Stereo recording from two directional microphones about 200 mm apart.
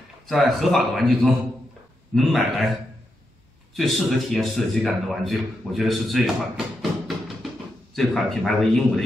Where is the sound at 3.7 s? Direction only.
Centre (ahead or behind).